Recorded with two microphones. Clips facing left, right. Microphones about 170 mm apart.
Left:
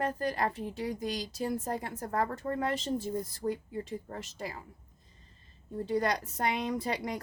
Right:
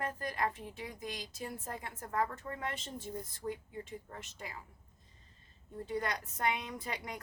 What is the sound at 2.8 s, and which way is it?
Speech, 90° left.